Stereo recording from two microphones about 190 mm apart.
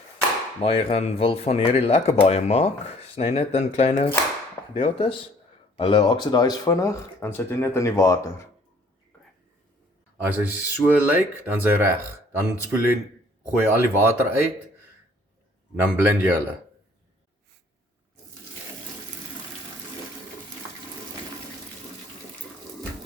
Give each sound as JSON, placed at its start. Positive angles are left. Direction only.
{"t": 0.6, "sound": "speech", "side_deg": 30}
{"t": 10.2, "sound": "speech", "side_deg": -10}
{"t": 15.7, "sound": "speech", "side_deg": -10}